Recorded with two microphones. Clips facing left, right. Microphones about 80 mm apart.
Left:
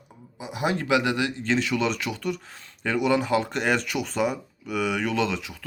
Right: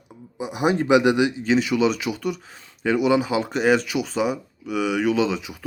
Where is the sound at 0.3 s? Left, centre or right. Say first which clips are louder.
Right 5 dB; centre.